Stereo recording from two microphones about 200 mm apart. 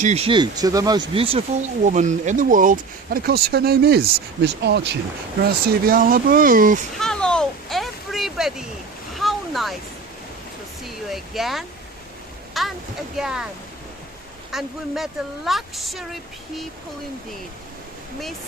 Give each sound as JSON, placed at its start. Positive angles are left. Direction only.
{"t": 0.0, "sound": "speech", "side_deg": -30}
{"t": 7.0, "sound": "a sound", "side_deg": 5}
{"t": 10.8, "sound": "speech", "side_deg": 0}
{"t": 14.5, "sound": "speech", "side_deg": 0}